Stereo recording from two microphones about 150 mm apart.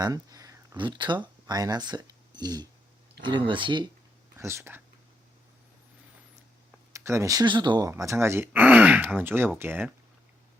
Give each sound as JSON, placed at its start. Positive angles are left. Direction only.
{"t": 0.0, "sound": "a sound", "side_deg": -25}
{"t": 0.9, "sound": "speech", "side_deg": -30}
{"t": 4.4, "sound": "speech", "side_deg": -20}
{"t": 6.9, "sound": "speech", "side_deg": -20}